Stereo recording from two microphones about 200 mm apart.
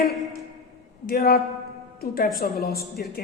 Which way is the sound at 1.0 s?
50° left (ahead or behind).